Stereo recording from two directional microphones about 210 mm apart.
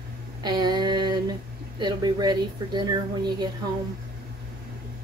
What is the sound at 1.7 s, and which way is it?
A woman's voice, 20° right (ahead or behind).